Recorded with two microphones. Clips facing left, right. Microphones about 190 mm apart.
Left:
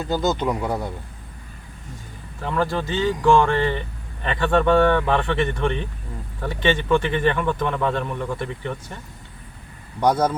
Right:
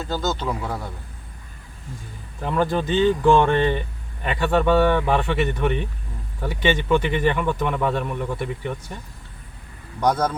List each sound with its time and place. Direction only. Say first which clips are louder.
0.0 s speech: left 3 dB; 15° left (ahead or behind)
2.4 s speech: right 2 dB; 15° right (ahead or behind)
10.0 s speech: left 2 dB; 10° left (ahead or behind)